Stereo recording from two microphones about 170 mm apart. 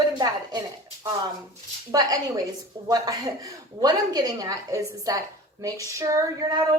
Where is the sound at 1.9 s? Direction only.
20° right (ahead or behind).